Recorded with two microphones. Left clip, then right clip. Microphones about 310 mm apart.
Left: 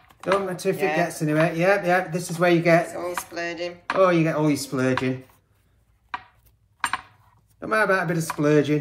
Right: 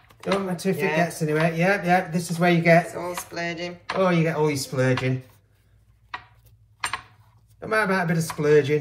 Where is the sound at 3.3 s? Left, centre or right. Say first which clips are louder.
Left 1 dB; centre.